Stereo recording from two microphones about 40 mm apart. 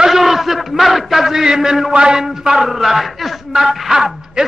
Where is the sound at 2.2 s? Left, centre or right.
Centre.